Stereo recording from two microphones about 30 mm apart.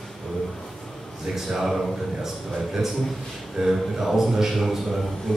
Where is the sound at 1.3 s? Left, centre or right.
Centre.